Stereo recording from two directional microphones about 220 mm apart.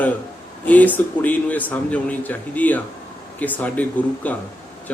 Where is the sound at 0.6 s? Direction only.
5° left (ahead or behind).